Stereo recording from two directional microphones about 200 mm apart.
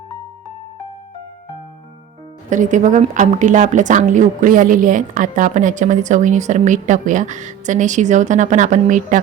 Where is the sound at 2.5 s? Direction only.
40° right (ahead or behind).